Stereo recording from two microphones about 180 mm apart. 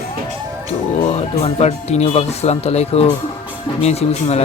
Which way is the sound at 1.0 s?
35° left (ahead or behind).